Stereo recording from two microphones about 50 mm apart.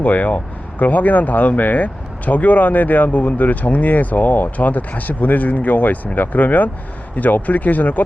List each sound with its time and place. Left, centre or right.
0.0 s speech: left